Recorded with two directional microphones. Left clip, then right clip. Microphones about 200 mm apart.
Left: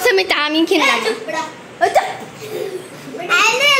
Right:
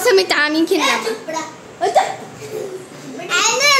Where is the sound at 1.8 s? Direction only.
Centre (ahead or behind).